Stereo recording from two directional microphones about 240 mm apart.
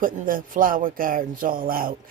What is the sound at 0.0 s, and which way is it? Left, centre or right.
Speech, right.